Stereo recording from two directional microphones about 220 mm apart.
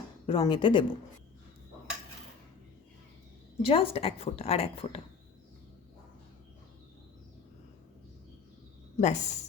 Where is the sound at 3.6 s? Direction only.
25° left (ahead or behind).